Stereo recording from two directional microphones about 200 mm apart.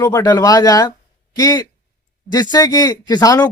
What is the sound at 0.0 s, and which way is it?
Speech, 15° left (ahead or behind).